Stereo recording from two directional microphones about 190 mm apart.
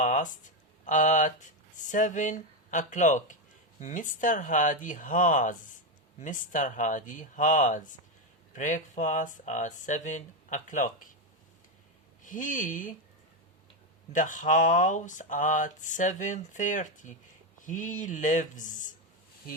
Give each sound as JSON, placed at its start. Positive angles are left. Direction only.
{"t": 0.0, "sound": "speech", "side_deg": 40}
{"t": 12.2, "sound": "speech", "side_deg": 45}
{"t": 14.1, "sound": "speech", "side_deg": 40}